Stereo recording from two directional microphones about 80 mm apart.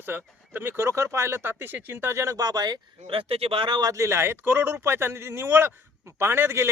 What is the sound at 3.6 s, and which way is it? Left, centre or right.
Speech, right.